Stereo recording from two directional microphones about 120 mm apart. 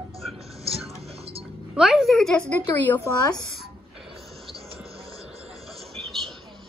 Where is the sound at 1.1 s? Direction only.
55° right (ahead or behind).